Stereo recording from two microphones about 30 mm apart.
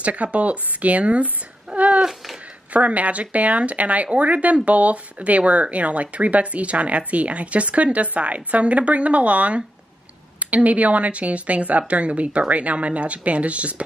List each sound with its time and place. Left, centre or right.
0.0 s speech: right
1.7 s a sound: right
2.7 s speech: right